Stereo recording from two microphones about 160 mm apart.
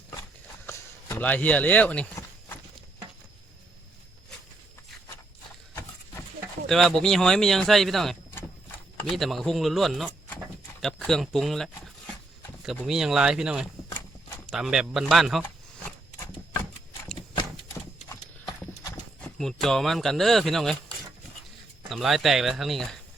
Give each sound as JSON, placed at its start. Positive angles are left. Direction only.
{"t": 0.7, "sound": "speech", "side_deg": 15}
{"t": 6.7, "sound": "speech", "side_deg": 0}
{"t": 12.8, "sound": "speech", "side_deg": -5}
{"t": 18.1, "sound": "clip-clop", "side_deg": 20}
{"t": 19.4, "sound": "speech", "side_deg": 0}